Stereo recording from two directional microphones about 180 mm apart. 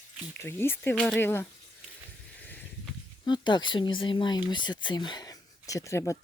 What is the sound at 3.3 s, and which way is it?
Speech, 25° left (ahead or behind).